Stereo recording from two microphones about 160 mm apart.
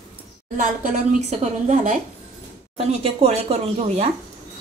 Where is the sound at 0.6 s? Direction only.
50° right (ahead or behind).